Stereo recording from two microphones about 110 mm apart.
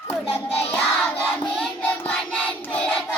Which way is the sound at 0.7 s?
15° left (ahead or behind).